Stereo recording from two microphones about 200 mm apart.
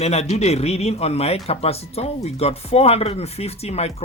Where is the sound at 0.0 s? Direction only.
30° left (ahead or behind).